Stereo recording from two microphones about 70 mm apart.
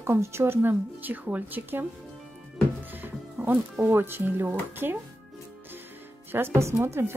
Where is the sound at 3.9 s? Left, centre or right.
Right.